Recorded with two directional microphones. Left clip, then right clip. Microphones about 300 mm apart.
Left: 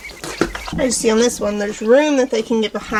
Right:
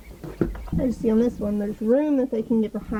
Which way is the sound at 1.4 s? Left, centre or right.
Centre.